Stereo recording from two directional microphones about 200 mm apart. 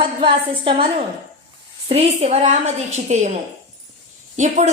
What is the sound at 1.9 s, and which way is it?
A woman's voice, 30° right (ahead or behind).